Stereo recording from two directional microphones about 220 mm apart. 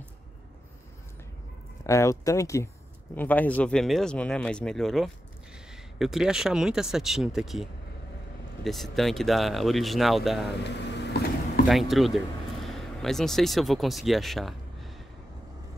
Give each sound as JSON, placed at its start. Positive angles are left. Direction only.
{"t": 1.9, "sound": "speech", "side_deg": 15}
{"t": 10.6, "sound": "vehicle", "side_deg": 50}
{"t": 11.6, "sound": "speech", "side_deg": 0}